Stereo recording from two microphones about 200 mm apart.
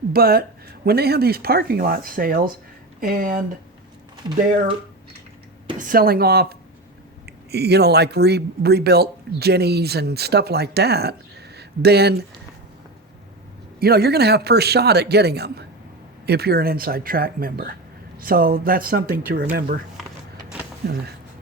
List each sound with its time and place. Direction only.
0.1 s a man's voice: 50° right (ahead or behind)
4.2 s speech: 20° right (ahead or behind)
5.8 s a man's voice: 45° right (ahead or behind)
13.7 s a man's voice: 50° right (ahead or behind)